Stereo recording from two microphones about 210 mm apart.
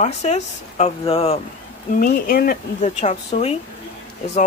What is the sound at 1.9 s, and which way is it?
Speech, 40° left (ahead or behind).